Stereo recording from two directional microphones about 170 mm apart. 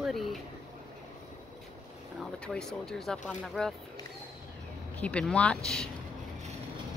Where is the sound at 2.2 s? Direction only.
5° left (ahead or behind).